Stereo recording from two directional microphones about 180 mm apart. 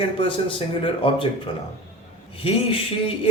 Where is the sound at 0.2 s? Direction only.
30° left (ahead or behind).